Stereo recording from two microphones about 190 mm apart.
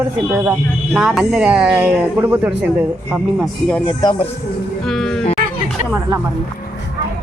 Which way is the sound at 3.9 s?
20° left (ahead or behind).